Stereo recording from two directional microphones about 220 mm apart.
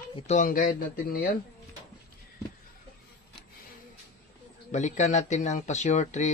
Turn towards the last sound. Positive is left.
turn(degrees=35)  # may be behind; listen again after turning